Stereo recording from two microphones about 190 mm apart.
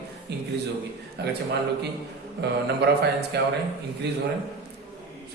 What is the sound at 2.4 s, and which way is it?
A man's voice, 60° right (ahead or behind).